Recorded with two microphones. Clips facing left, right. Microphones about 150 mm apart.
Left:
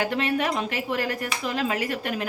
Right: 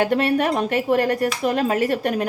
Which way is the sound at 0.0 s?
45° right (ahead or behind).